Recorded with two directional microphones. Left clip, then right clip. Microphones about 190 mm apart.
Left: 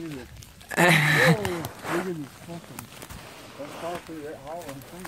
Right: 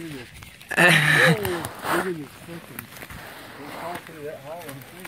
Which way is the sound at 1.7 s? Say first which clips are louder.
Right 5 dB; 25° right (ahead or behind).